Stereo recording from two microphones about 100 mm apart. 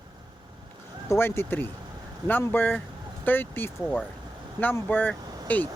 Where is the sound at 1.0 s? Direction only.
25° left (ahead or behind).